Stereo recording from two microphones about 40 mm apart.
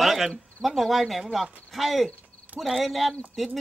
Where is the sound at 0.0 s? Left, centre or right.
Centre.